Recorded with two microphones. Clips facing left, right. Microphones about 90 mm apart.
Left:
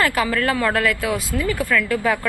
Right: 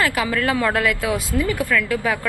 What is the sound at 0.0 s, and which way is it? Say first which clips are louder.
Speech: left 1 dB; 5° right (ahead or behind).